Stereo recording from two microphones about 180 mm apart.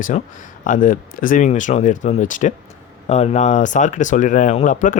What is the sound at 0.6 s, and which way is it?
Speech, 45° left (ahead or behind).